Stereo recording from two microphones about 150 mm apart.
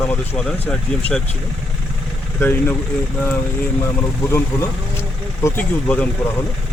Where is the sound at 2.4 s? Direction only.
15° left (ahead or behind).